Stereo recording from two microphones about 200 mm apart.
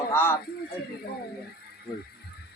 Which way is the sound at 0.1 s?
15° left (ahead or behind).